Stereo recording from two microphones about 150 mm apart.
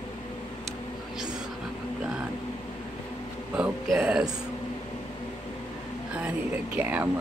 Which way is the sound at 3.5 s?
10° right (ahead or behind).